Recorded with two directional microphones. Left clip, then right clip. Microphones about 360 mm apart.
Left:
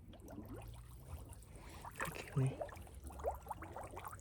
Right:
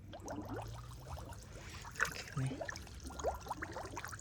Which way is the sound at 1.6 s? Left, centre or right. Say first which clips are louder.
Right 7 dB; centre.